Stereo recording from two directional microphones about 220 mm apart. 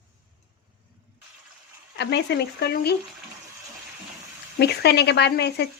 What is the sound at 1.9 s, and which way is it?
Speech, 50° left (ahead or behind).